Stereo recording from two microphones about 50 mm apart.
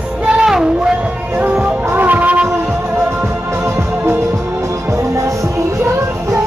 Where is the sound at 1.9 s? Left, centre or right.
Right.